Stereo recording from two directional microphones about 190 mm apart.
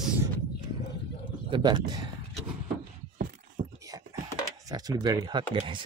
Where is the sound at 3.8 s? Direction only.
15° right (ahead or behind).